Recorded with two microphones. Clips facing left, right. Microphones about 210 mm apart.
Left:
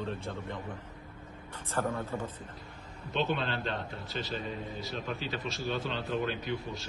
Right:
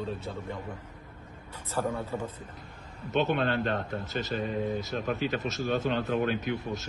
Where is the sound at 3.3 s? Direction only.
50° right (ahead or behind).